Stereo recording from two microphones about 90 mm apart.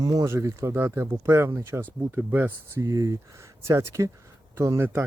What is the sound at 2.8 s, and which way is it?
Speech, 40° right (ahead or behind).